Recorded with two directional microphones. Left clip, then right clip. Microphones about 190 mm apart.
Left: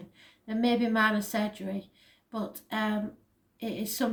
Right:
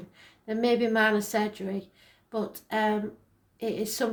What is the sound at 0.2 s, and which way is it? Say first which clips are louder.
A woman's voice: right 3 dB; 35° right (ahead or behind).